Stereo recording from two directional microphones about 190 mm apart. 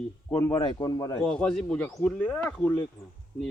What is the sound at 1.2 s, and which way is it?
Speech, 5° left (ahead or behind).